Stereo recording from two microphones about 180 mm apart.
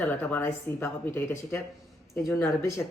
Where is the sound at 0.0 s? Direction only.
5° left (ahead or behind).